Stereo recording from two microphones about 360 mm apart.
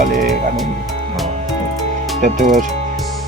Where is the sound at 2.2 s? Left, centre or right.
Right.